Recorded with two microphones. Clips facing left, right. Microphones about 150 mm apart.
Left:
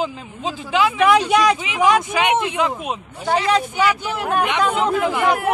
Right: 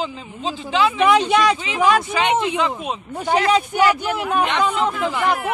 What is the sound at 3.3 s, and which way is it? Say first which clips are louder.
Speech: right 1 dB; 15° right (ahead or behind).